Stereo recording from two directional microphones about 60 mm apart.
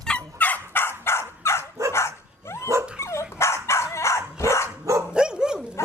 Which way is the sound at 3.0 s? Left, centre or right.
Left.